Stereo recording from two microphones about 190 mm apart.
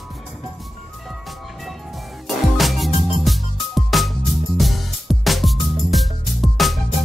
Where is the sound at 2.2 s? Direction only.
Centre (ahead or behind).